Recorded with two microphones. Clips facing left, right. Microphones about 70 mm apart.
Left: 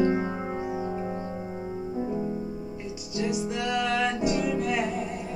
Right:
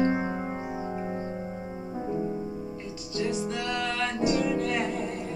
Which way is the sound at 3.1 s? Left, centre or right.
Centre.